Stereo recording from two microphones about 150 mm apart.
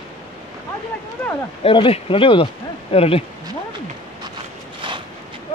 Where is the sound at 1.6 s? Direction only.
40° left (ahead or behind).